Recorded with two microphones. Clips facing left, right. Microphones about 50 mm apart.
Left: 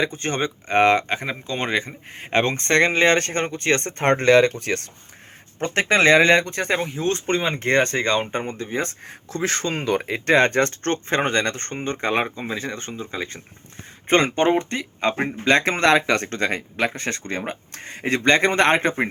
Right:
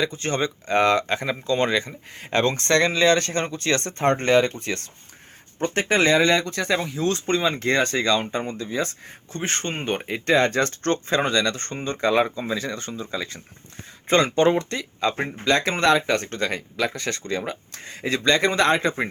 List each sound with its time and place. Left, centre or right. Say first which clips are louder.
0.0 s speech: left 1 dB; left
1.0 s speech: right 2 dB; centre; by 4.0 s left
4.0 s speech: left 3 dB; left
9.3 s speech: left 4 dB; left
10.3 s speech: left 2 dB; left